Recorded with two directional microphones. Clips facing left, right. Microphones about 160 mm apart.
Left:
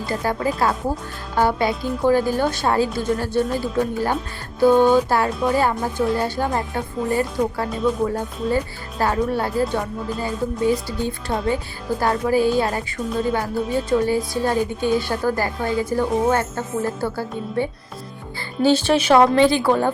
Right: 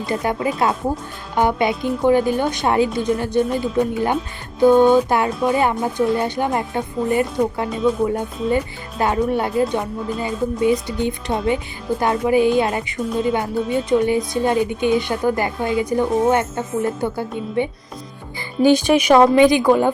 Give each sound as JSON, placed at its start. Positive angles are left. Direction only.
{"t": 0.0, "sound": "speech", "side_deg": -20}